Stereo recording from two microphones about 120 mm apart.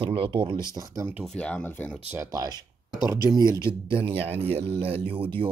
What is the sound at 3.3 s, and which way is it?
Speech, 35° right (ahead or behind).